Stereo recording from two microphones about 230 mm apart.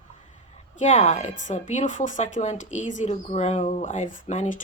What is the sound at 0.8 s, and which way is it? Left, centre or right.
A woman's voice, left.